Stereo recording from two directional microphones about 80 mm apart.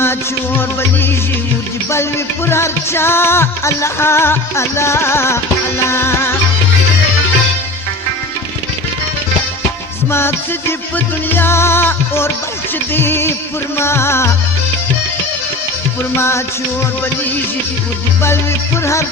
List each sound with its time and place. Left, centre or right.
0.0 s music: left
10.1 s music: left
16.1 s music: left